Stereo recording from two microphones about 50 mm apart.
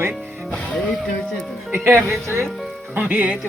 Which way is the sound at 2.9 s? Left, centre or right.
Right.